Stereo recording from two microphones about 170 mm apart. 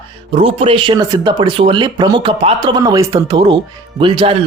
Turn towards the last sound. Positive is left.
turn(degrees=-30)  # may be behind; listen again after turning